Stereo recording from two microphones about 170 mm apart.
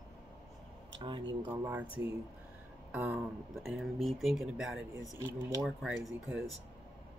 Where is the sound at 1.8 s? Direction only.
30° left (ahead or behind).